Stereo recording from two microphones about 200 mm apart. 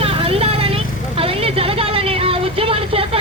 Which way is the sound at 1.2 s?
30° right (ahead or behind).